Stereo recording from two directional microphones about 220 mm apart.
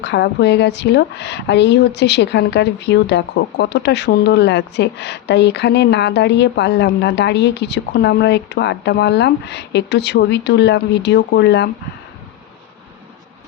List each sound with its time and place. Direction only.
0.0 s a woman's voice: 50° left (ahead or behind)